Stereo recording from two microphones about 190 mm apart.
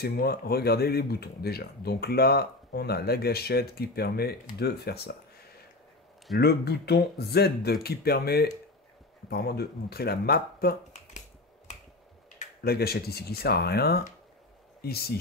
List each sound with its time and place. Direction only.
0.0 s speech: 55° left (ahead or behind)
6.3 s speech: 60° left (ahead or behind)
12.6 s speech: 55° left (ahead or behind)